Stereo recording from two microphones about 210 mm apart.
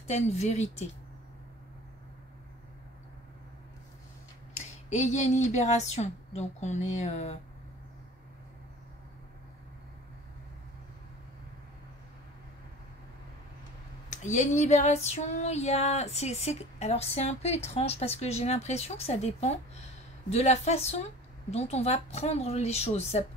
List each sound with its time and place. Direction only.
0.1 s female singing: 30° left (ahead or behind)
4.6 s female singing: 35° left (ahead or behind)
14.1 s female singing: 35° left (ahead or behind)